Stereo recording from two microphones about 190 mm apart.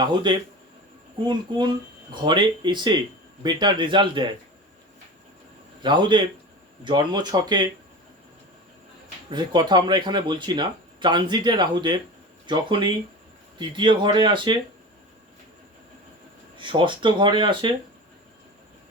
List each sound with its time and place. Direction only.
0.0 s speech: 25° right (ahead or behind)
5.8 s speech: 25° right (ahead or behind)
9.3 s speech: 25° right (ahead or behind)
16.6 s speech: 25° right (ahead or behind)